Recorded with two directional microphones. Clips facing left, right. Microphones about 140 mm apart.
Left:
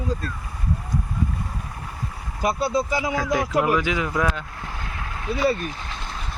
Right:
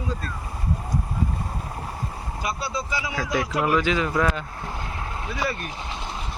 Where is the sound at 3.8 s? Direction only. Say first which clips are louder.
Right 1 dB; 15° left (ahead or behind).